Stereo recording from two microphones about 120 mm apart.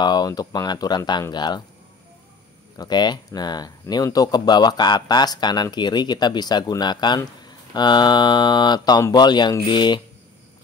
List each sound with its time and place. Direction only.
0.0 s speech: 35° left (ahead or behind)
2.8 s speech: 35° left (ahead or behind)